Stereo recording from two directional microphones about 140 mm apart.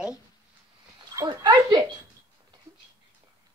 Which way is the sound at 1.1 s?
30° right (ahead or behind).